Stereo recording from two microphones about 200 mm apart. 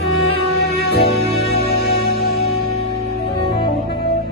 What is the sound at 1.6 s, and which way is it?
Music, 50° left (ahead or behind).